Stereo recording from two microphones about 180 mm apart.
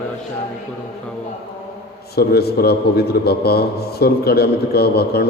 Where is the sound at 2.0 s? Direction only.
60° left (ahead or behind).